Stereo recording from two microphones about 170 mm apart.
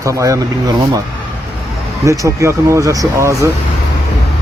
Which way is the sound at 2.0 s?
20° right (ahead or behind).